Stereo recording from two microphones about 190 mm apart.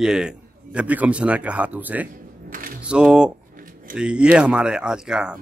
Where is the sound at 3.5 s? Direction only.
45° right (ahead or behind).